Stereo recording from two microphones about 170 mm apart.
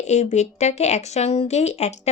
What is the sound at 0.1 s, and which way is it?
Speech, 45° left (ahead or behind).